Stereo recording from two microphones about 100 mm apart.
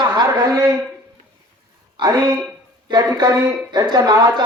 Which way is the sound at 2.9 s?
40° right (ahead or behind).